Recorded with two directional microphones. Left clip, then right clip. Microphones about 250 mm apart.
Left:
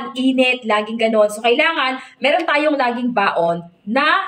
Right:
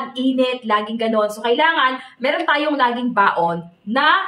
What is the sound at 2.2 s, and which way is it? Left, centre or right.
A woman's voice, centre.